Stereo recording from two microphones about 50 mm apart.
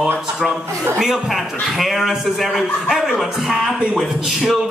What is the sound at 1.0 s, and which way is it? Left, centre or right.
A man's voice, centre.